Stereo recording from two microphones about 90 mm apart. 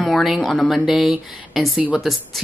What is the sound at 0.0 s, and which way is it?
Speech, centre (ahead or behind).